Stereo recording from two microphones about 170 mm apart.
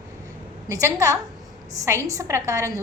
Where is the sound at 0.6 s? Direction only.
20° right (ahead or behind).